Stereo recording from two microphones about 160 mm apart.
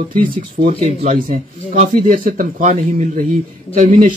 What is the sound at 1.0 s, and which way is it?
Speech, 55° right (ahead or behind).